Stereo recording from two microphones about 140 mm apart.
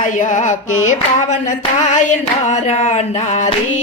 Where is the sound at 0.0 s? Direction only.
65° left (ahead or behind).